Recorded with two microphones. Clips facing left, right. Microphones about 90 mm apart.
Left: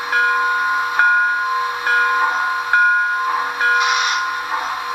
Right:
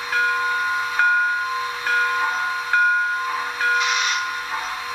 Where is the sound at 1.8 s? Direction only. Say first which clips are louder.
Left 3 dB; 60° left (ahead or behind).